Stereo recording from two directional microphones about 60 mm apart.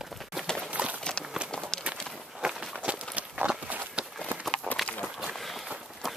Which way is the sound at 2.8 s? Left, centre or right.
Centre.